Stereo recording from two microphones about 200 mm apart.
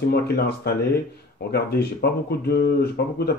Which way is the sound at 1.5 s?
55° left (ahead or behind).